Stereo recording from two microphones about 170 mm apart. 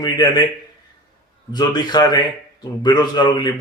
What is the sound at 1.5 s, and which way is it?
Speech, 25° left (ahead or behind).